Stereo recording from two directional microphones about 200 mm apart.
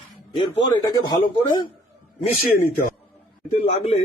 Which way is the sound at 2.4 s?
45° left (ahead or behind).